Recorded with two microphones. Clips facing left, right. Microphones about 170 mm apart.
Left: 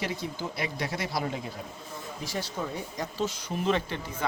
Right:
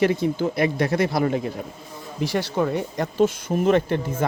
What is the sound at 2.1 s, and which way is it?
Speech, 70° right (ahead or behind).